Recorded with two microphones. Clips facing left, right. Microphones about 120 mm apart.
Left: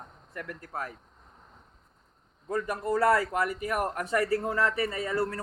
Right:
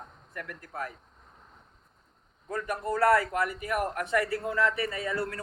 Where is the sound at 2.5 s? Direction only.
30° left (ahead or behind).